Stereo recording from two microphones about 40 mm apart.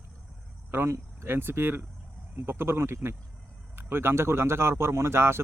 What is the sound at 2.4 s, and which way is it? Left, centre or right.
Speech, right.